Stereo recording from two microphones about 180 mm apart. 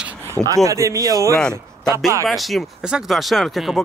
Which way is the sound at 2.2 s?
Centre (ahead or behind).